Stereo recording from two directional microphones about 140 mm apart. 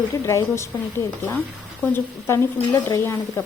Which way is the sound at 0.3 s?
20° left (ahead or behind).